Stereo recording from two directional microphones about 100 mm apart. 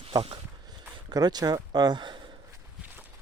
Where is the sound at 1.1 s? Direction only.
40° right (ahead or behind).